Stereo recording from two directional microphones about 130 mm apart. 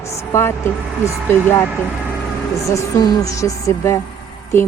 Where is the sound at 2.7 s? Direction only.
25° left (ahead or behind).